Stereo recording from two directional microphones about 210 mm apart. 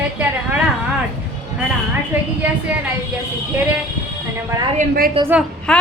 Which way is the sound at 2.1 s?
10° right (ahead or behind).